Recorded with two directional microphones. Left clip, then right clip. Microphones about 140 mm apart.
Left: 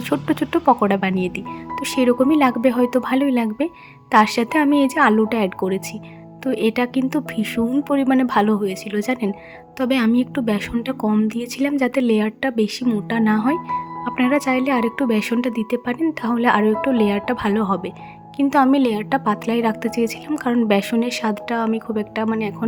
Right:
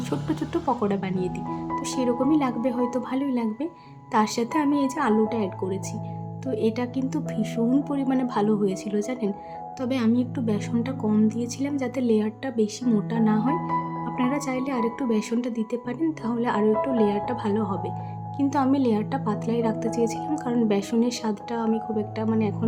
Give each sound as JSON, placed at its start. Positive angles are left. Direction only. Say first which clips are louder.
{"t": 0.1, "sound": "speech", "louder": "left 9 dB", "side_deg": 40}